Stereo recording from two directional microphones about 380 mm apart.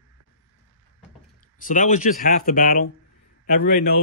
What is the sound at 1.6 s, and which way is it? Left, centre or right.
Speech, centre.